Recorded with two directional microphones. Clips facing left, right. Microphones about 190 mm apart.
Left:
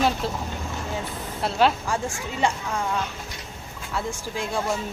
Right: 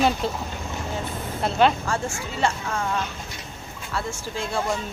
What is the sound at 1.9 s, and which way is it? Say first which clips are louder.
Speech: even; 15° left (ahead or behind).